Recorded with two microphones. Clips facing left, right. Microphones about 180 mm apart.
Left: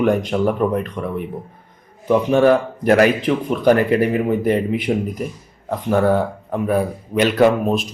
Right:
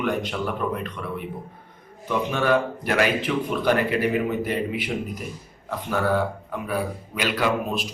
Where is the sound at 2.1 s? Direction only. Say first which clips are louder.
Left 9 dB; 40° left (ahead or behind).